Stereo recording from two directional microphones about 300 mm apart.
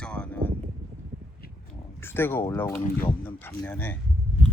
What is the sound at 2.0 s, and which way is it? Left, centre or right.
Speech, centre.